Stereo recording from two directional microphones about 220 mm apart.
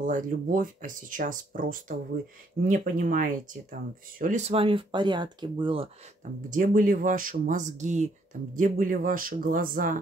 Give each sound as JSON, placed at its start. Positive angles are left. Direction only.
{"t": 0.0, "sound": "speech", "side_deg": -35}
{"t": 6.5, "sound": "speech", "side_deg": -35}